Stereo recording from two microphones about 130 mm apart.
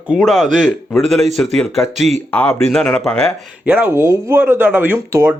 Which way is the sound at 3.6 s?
10° right (ahead or behind).